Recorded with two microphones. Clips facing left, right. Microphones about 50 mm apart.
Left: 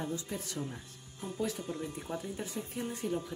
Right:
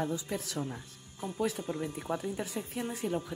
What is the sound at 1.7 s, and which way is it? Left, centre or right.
Speech, right.